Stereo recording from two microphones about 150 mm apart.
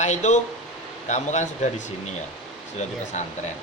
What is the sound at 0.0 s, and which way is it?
Speech, 50° left (ahead or behind).